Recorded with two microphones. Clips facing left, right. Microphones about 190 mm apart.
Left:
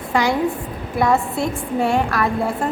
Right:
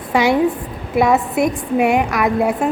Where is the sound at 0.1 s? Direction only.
20° right (ahead or behind).